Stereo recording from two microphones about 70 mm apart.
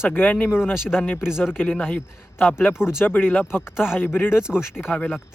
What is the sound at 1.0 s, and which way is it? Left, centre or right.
Speech, left.